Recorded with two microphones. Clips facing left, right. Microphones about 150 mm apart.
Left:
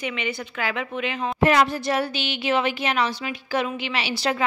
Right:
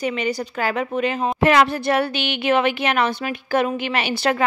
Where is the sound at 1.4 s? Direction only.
80° right; by 4.4 s 55° right (ahead or behind).